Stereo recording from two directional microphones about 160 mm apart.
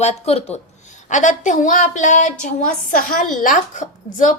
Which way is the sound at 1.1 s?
50° left (ahead or behind).